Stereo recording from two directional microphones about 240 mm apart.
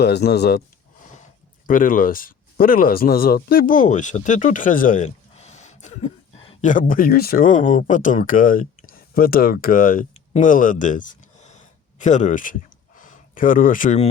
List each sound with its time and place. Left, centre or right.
0.0 s speech: left
1.6 s speech: left